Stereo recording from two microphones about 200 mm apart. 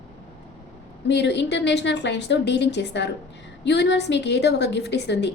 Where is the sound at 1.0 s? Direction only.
60° left (ahead or behind).